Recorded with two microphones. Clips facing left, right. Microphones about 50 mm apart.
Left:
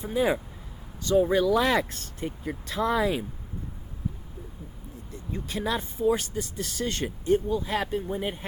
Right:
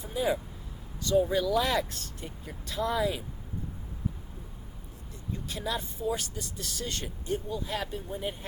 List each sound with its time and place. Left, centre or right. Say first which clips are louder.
0.0 s speech: left 4 dB; left
2.2 s speech: left 12 dB; left
5.3 s speech: left 4 dB; left